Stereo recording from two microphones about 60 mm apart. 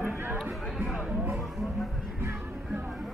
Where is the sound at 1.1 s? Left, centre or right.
Right.